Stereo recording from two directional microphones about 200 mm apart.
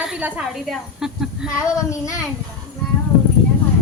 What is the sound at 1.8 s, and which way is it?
Child singing, 15° left (ahead or behind).